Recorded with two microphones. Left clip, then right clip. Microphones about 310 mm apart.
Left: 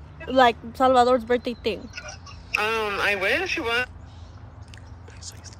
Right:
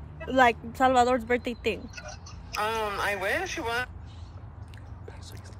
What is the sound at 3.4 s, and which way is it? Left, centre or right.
Speech, left.